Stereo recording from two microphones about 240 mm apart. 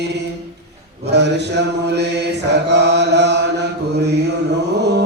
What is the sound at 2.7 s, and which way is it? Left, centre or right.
Chant, right.